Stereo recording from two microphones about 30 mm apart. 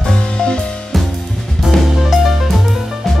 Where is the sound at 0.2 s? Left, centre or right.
Left.